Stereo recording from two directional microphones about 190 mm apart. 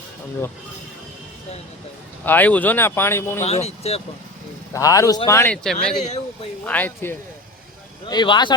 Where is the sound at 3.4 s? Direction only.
35° left (ahead or behind).